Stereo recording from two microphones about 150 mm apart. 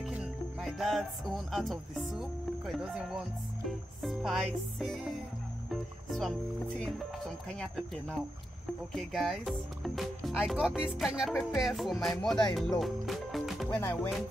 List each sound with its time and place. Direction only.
0.0 s music: 5° right (ahead or behind)
4.0 s speech: centre (ahead or behind)
7.5 s speech: 5° left (ahead or behind)
13.7 s music: 15° left (ahead or behind)